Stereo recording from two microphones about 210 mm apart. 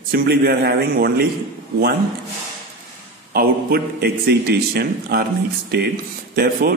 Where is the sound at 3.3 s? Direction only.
45° right (ahead or behind).